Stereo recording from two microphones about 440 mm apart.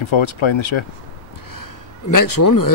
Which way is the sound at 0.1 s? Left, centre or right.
Left.